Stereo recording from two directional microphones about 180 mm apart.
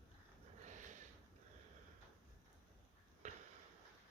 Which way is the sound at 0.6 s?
45° right (ahead or behind).